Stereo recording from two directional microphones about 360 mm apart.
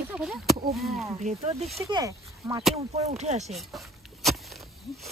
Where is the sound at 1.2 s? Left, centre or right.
Centre.